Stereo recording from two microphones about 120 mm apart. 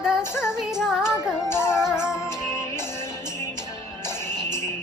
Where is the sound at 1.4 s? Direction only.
20° left (ahead or behind).